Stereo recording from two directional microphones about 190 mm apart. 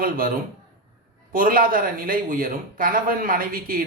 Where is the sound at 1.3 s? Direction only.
45° right (ahead or behind).